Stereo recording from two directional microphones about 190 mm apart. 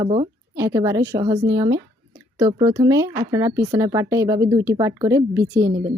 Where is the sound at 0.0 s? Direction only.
30° right (ahead or behind).